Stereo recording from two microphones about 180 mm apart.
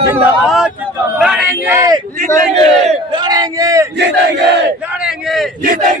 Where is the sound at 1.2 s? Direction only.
5° right (ahead or behind).